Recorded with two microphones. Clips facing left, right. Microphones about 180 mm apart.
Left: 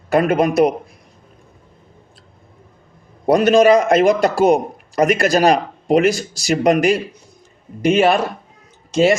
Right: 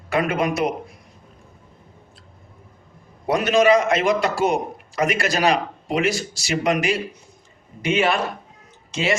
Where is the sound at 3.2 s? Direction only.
40° left (ahead or behind).